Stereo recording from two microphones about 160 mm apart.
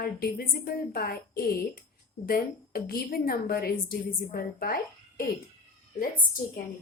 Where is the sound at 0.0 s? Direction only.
75° left (ahead or behind).